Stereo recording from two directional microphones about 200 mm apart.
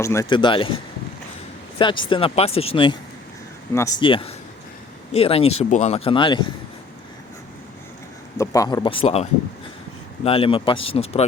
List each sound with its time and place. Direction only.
0.0 s speech: 15° left (ahead or behind)
1.8 s speech: 25° left (ahead or behind)
3.7 s speech: 15° left (ahead or behind)
4.0 s speech: 25° left (ahead or behind)
8.4 s speech: 15° left (ahead or behind)
10.2 s speech: 30° left (ahead or behind)